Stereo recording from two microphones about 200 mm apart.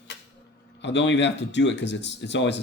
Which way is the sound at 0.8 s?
60° left (ahead or behind).